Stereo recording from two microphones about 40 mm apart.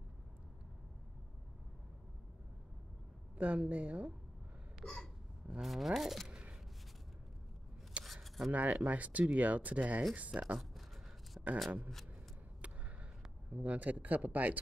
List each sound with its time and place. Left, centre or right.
3.3 s speech: right
4.8 s hiccup: centre
5.5 s speech: centre
8.0 s a sound: centre
8.5 s speech: right
11.4 s a sound: right
13.5 s speech: right